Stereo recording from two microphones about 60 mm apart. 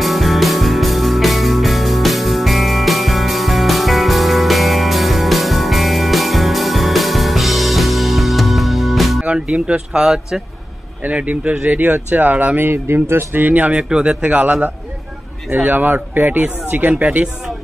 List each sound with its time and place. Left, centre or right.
0.0 s music: centre
9.2 s speech: centre
11.0 s speech: right
12.6 s speech: right
13.7 s speech: centre